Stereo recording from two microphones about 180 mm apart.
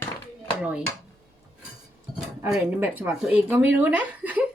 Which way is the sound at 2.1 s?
5° right (ahead or behind).